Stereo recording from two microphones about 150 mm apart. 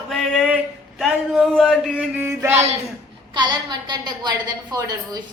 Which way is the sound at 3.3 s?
30° right (ahead or behind).